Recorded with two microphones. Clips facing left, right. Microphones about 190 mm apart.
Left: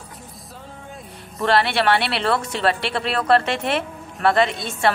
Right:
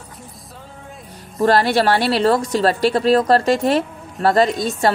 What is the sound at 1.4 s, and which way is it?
Speech, 40° right (ahead or behind).